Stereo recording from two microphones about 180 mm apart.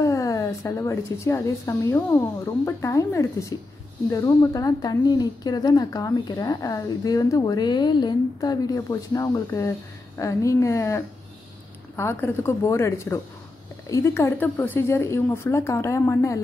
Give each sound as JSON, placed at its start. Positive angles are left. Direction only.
{"t": 0.0, "sound": "a woman's voice", "side_deg": 15}
{"t": 12.0, "sound": "a woman's voice", "side_deg": 15}